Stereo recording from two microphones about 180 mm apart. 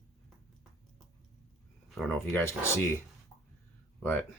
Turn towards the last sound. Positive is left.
turn(degrees=10)  # may be behind; listen again after turning